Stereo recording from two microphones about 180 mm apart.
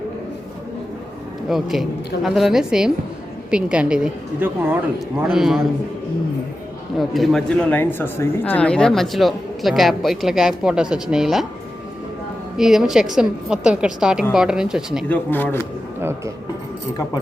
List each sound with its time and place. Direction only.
1.5 s a woman's voice: centre (ahead or behind)
7.0 s speech: centre (ahead or behind)
12.5 s speech: centre (ahead or behind)
15.1 s speech: 10° left (ahead or behind)